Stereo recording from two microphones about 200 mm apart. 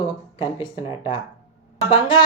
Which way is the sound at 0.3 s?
25° left (ahead or behind).